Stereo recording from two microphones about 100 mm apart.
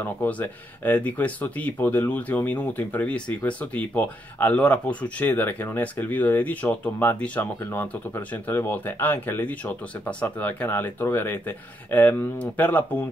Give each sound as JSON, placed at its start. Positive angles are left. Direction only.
{"t": 0.0, "sound": "speech", "side_deg": 15}